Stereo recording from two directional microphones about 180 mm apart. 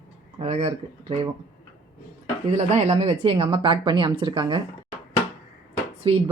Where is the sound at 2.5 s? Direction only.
40° right (ahead or behind).